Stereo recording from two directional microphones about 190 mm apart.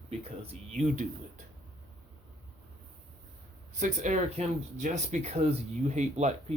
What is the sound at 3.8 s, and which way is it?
Speech, 40° right (ahead or behind).